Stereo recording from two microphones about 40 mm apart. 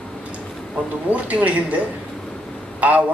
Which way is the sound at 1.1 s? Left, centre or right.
Right.